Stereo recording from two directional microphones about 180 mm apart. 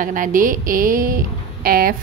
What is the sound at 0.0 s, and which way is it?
A woman's voice, 50° right (ahead or behind).